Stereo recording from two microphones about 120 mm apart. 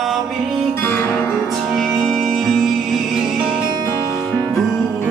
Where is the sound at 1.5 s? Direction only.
Centre (ahead or behind).